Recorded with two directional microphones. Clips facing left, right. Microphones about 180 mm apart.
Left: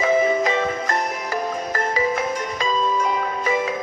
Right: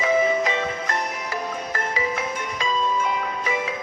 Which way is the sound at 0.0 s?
40° left (ahead or behind).